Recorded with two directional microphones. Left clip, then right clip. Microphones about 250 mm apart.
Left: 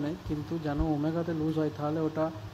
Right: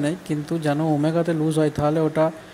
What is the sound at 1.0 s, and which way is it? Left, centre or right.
Speech, right.